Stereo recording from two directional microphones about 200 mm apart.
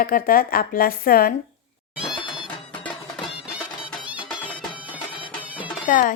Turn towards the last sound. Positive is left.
turn(degrees=40)  # may be behind; listen again after turning